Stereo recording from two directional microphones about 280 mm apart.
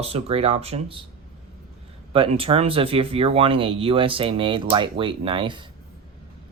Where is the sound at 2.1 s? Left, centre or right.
Centre.